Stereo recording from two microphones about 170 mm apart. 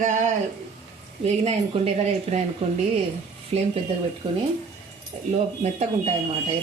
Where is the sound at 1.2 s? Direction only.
40° right (ahead or behind).